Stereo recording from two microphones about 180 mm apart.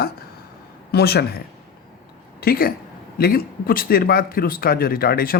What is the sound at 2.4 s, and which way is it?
Speech, 55° left (ahead or behind).